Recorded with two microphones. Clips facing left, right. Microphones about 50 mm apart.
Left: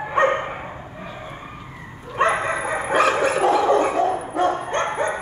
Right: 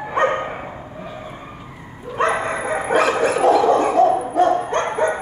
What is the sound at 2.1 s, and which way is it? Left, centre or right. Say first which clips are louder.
Bow-wow: even; centre.